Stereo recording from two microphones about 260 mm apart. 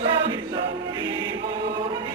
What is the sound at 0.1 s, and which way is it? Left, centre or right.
Choir, centre.